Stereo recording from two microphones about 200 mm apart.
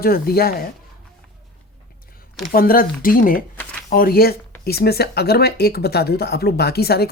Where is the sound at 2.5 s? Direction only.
45° left (ahead or behind).